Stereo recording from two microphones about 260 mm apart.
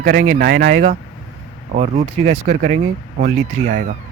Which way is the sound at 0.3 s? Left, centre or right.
Right.